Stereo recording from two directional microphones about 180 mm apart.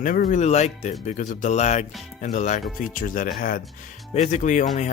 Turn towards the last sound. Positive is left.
turn(degrees=45)  # may be behind; listen again after turning